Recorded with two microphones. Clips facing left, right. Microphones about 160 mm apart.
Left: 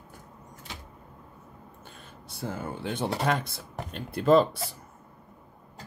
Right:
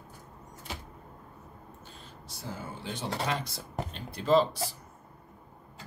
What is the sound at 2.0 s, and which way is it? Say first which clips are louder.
Speech: left 7 dB; 55° left (ahead or behind).